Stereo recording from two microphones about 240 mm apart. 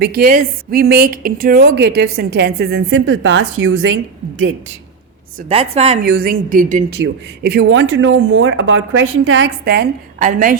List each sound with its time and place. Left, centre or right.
0.0 s a woman's voice: right
5.5 s a woman's voice: right
6.0 s a woman's voice: right